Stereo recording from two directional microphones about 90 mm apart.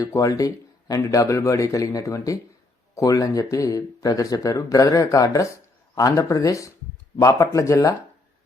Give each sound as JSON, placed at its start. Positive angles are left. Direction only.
{"t": 0.0, "sound": "speech", "side_deg": 35}